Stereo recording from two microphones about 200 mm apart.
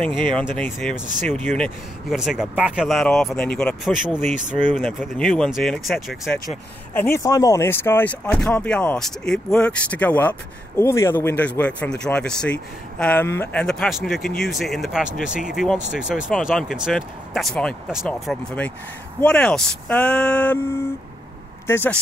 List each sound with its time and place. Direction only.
0.3 s speech: 5° left (ahead or behind)
4.2 s speech: 40° right (ahead or behind)
4.7 s speech: centre (ahead or behind)
6.9 s speech: 10° left (ahead or behind)
21.6 s speech: 10° left (ahead or behind)